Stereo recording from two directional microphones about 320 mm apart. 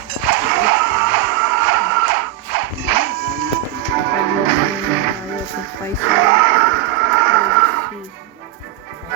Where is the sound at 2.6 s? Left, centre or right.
Right.